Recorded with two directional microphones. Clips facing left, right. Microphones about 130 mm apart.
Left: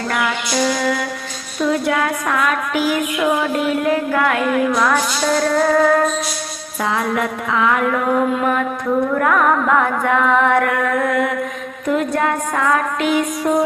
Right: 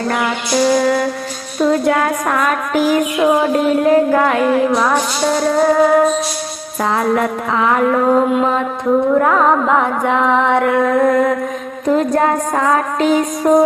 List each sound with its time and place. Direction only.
0.1 s music: 30° right (ahead or behind)
6.8 s music: 40° right (ahead or behind)
8.3 s music: 20° right (ahead or behind); by 13.6 s 40° right (ahead or behind)